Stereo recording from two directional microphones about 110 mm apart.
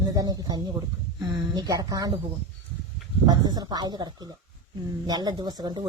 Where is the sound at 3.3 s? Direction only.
35° right (ahead or behind).